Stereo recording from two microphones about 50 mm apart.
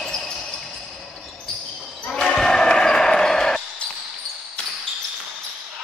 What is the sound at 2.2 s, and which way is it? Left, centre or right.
Basketball bounce, centre.